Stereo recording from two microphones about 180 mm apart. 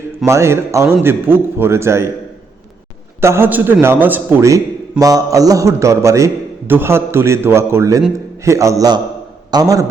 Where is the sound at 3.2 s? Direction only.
15° right (ahead or behind).